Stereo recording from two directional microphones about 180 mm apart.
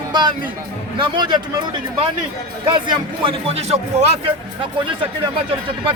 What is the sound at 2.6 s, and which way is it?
A man's voice, 30° right (ahead or behind).